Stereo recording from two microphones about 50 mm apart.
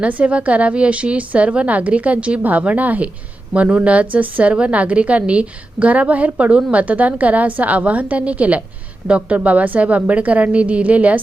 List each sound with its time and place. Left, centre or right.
0.0 s a woman's voice: right